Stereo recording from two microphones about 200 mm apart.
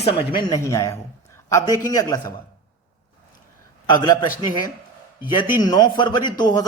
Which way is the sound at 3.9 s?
20° left (ahead or behind).